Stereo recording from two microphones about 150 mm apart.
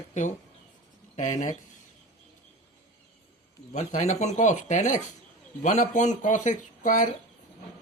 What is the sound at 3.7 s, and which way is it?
Speech, 50° left (ahead or behind).